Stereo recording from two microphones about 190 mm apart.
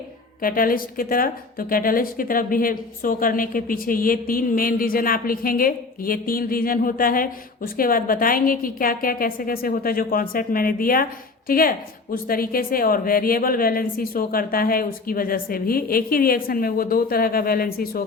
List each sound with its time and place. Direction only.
0.4 s a woman's voice: 50° left (ahead or behind)